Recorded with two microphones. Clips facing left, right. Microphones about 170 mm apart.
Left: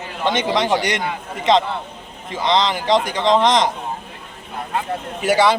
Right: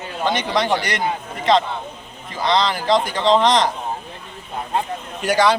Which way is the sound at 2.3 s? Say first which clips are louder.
Left 1 dB; 20° left (ahead or behind).